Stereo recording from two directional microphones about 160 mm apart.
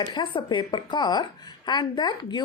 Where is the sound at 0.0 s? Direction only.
25° left (ahead or behind).